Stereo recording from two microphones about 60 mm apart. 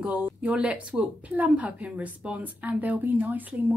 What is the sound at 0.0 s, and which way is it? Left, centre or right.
A woman's voice, centre.